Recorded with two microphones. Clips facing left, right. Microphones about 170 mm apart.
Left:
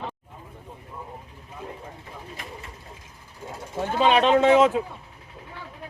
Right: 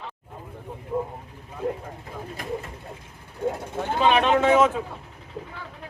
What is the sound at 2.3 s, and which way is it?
Pigeon, 45° right (ahead or behind).